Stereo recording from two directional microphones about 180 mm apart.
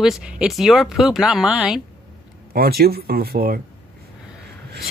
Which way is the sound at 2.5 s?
60° right (ahead or behind).